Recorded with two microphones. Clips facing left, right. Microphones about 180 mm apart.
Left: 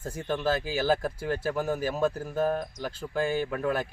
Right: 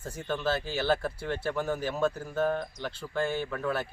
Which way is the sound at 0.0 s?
10° left (ahead or behind).